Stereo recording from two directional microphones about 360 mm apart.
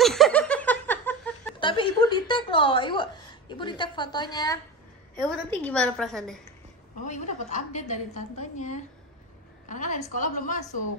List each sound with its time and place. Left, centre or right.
0.0 s laughter: centre
5.1 s a woman's voice: centre
7.1 s a woman's voice: centre